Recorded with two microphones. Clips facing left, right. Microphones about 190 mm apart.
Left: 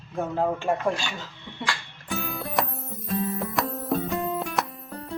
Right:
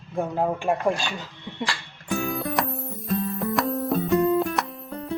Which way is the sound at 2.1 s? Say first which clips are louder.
Right 4 dB; centre (ahead or behind).